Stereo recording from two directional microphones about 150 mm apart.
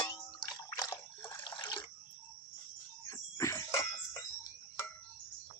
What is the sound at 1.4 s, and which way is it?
Water, 30° left (ahead or behind).